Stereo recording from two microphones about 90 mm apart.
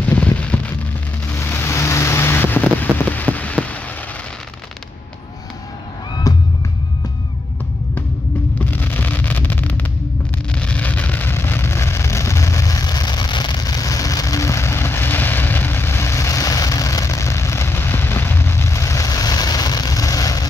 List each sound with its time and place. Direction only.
0.0 s rain: 15° left (ahead or behind)
1.3 s vehicle: 25° left (ahead or behind)
6.3 s music: 45° left (ahead or behind)
8.5 s a sound: 20° left (ahead or behind)
10.5 s vehicle: 15° left (ahead or behind); by 20.4 s 40° left (ahead or behind)